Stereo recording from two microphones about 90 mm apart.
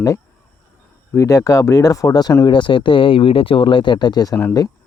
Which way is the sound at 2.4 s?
60° left (ahead or behind).